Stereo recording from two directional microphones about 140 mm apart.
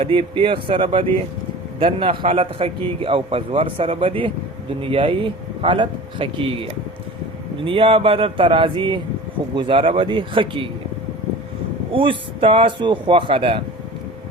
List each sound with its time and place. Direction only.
0.0 s a man's voice: 40° right (ahead or behind)
11.9 s a man's voice: 40° right (ahead or behind)